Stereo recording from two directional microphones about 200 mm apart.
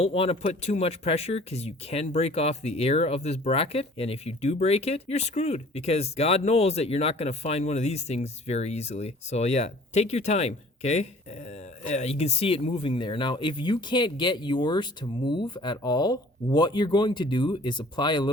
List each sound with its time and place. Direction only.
0.0 s speech: 30° left (ahead or behind)